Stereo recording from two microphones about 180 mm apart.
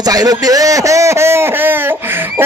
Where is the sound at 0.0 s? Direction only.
20° right (ahead or behind).